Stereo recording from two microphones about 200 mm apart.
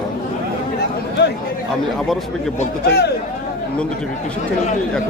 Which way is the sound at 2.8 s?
55° left (ahead or behind).